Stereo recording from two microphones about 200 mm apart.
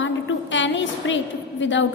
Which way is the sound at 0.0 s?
70° left (ahead or behind).